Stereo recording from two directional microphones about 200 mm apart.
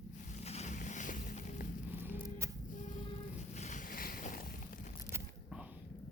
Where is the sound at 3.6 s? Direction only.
40° left (ahead or behind).